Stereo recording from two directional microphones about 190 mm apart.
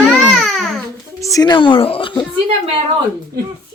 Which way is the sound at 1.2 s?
15° left (ahead or behind).